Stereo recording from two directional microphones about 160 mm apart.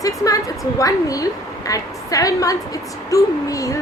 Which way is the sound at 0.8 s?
20° left (ahead or behind).